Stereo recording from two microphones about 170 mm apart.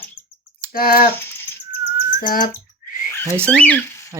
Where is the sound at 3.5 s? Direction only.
5° left (ahead or behind).